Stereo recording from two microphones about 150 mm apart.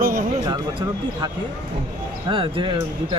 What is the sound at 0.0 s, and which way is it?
Music, 65° right (ahead or behind).